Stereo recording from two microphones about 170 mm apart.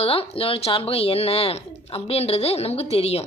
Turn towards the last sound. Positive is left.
turn(degrees=35)  # may be behind; listen again after turning